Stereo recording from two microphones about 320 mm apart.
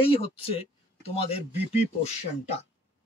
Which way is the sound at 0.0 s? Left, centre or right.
Centre.